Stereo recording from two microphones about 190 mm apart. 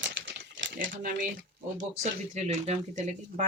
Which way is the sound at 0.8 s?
45° right (ahead or behind).